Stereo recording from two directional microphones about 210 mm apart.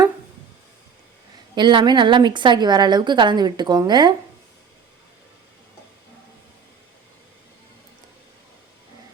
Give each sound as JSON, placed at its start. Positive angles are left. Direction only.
{"t": 1.5, "sound": "a woman's voice", "side_deg": -20}